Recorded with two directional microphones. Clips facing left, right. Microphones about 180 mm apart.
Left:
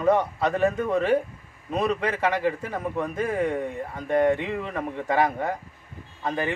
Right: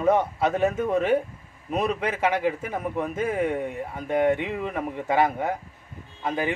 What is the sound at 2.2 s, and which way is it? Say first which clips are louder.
A man's voice: right 3 dB; 15° right (ahead or behind).